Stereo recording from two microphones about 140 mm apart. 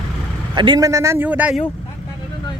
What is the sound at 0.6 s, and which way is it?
A man's voice, 30° right (ahead or behind).